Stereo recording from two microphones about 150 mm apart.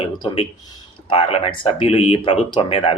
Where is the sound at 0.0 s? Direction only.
40° left (ahead or behind).